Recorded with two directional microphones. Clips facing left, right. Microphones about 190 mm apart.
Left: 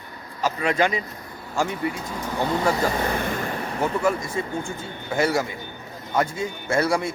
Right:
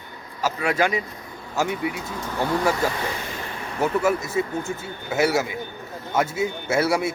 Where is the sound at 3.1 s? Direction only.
55° left (ahead or behind).